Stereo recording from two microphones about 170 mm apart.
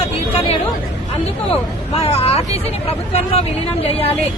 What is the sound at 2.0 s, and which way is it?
Speech, 35° left (ahead or behind).